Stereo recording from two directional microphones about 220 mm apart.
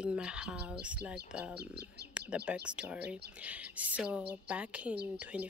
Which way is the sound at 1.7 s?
50° right (ahead or behind).